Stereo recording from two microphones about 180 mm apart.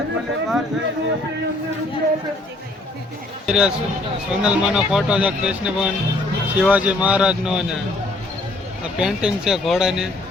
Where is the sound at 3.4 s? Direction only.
5° right (ahead or behind).